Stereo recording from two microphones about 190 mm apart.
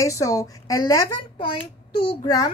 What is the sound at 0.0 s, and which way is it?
A woman's voice, 15° left (ahead or behind).